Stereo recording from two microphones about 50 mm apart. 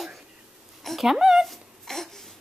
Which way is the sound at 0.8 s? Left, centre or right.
Centre.